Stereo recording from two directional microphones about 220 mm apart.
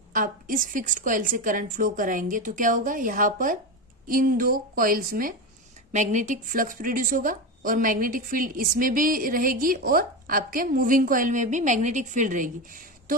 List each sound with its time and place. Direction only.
0.1 s a woman's voice: 40° right (ahead or behind)